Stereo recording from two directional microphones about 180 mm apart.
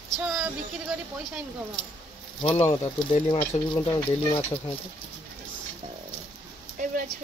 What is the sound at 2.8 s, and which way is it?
Speech, 35° left (ahead or behind).